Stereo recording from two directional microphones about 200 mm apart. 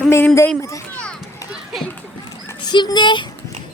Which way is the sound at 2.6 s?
20° left (ahead or behind).